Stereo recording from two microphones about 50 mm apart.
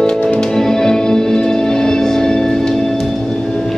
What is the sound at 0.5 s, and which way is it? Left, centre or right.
Music, centre.